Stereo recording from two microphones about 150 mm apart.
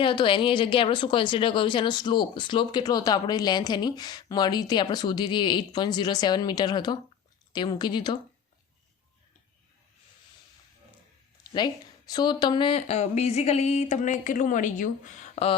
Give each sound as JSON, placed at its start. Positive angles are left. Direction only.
{"t": 0.0, "sound": "speech", "side_deg": 35}
{"t": 12.1, "sound": "speech", "side_deg": 30}